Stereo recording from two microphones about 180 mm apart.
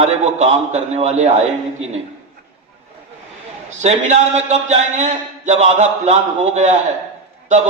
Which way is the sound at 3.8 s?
40° right (ahead or behind).